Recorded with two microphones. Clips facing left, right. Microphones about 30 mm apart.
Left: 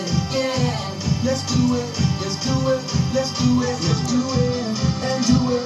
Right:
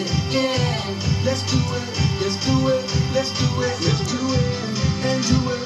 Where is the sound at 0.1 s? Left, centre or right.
Centre.